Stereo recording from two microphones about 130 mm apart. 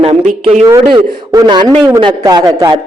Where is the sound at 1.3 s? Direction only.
30° right (ahead or behind).